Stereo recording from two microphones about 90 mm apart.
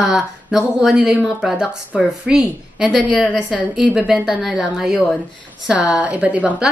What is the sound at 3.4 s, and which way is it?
Speech, 15° left (ahead or behind).